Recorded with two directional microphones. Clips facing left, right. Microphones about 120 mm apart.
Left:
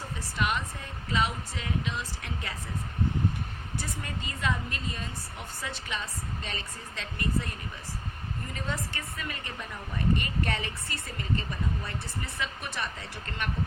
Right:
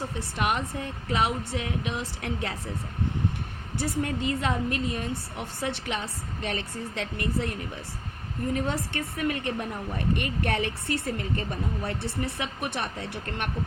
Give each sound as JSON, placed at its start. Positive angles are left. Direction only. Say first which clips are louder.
{"t": 0.2, "sound": "speech", "louder": "right 2 dB", "side_deg": -60}
{"t": 3.8, "sound": "a woman's voice", "louder": "right 10 dB", "side_deg": -65}
{"t": 8.5, "sound": "speech", "louder": "right 5 dB", "side_deg": -65}